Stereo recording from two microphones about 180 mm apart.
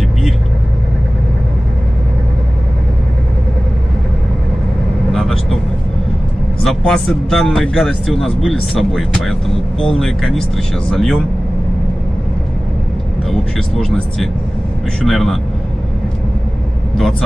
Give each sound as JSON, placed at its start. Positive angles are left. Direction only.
{"t": 5.1, "sound": "vehicle", "side_deg": 0}
{"t": 6.6, "sound": "speech", "side_deg": 0}
{"t": 13.3, "sound": "speech", "side_deg": 5}